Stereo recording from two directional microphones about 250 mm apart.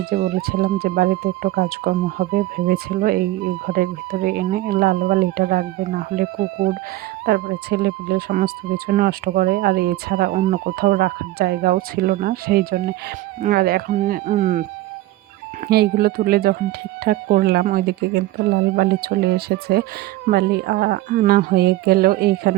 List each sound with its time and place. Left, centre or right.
0.0 s speech: right
7.3 s speech: right
15.6 s speech: right